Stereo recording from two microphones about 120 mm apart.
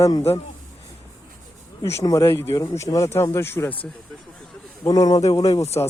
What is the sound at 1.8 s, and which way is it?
Speech, 25° left (ahead or behind).